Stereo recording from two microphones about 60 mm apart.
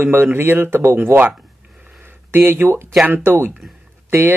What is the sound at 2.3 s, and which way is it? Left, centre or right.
Speech, right.